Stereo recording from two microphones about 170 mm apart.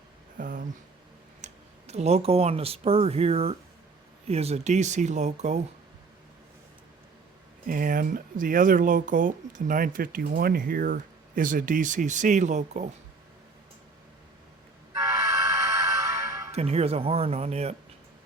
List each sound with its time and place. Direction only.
0.3 s a sound: 55° right (ahead or behind)
1.4 s clicking: 45° right (ahead or behind)
1.9 s speech: 40° right (ahead or behind)
7.7 s speech: 55° right (ahead or behind)
14.9 s music: 20° right (ahead or behind)
16.5 s speech: 40° right (ahead or behind)